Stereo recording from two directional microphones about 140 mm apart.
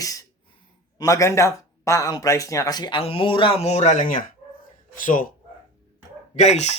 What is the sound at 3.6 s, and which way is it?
A man's voice, 55° left (ahead or behind).